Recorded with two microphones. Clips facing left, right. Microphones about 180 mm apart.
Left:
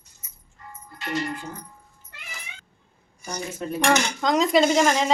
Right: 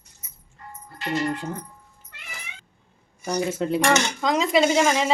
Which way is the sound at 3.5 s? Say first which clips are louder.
Right 6 dB; 80° right.